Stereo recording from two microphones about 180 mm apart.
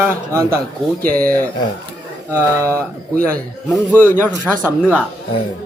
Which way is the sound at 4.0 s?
15° left (ahead or behind).